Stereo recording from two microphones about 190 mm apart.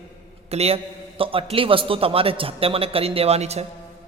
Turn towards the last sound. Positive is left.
turn(degrees=-35)  # may be behind; listen again after turning